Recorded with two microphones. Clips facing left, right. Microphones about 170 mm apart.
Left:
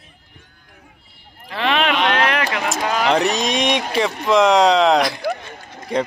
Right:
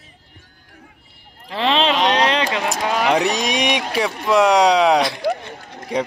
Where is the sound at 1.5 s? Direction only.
30° right (ahead or behind).